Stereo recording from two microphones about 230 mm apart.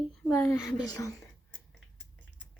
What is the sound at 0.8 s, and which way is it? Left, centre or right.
Speech, centre.